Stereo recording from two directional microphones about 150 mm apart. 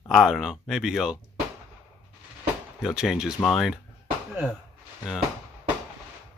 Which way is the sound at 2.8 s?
5° right (ahead or behind).